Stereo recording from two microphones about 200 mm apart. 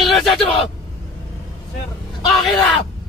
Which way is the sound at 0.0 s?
Centre (ahead or behind).